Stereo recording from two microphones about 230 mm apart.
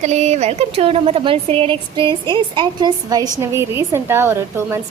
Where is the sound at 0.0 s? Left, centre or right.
Right.